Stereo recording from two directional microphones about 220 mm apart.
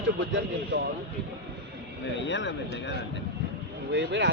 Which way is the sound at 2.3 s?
55° left (ahead or behind).